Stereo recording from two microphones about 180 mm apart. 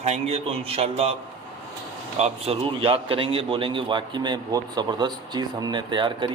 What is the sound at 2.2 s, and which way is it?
A man's voice, 30° right (ahead or behind).